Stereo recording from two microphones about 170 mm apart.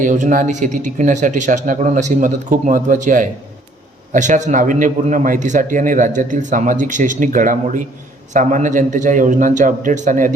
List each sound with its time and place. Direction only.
0.0 s a man's voice: 50° right (ahead or behind)